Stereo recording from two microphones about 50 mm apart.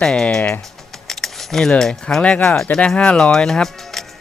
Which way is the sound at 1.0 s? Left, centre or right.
Centre.